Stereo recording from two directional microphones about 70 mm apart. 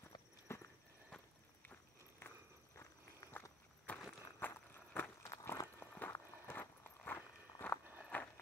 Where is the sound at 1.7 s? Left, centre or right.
Left.